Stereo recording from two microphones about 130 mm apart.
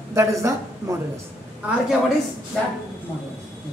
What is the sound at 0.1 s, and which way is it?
Speech, 25° right (ahead or behind).